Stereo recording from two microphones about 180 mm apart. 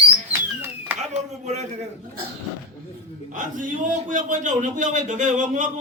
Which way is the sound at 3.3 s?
45° right (ahead or behind).